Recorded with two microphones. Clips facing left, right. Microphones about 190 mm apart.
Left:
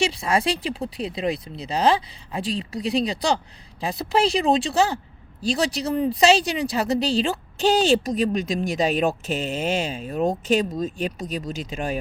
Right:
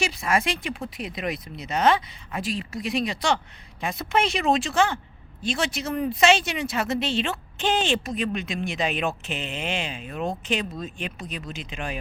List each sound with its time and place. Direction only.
0.0 s speech: 30° left (ahead or behind)